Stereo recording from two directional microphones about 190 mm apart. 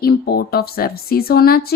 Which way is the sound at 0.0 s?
55° left (ahead or behind).